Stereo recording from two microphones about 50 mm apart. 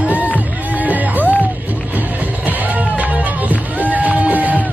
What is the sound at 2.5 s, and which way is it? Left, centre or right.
Music, right.